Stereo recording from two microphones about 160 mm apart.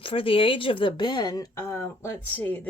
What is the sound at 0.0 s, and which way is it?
Speech, 35° left (ahead or behind).